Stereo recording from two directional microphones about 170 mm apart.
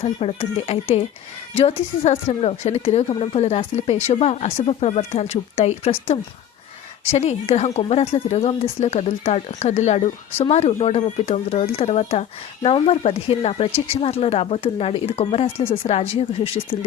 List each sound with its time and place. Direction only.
0.0 s speech: 35° left (ahead or behind)